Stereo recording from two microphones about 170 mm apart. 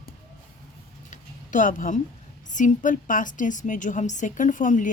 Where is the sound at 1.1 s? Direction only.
50° left (ahead or behind).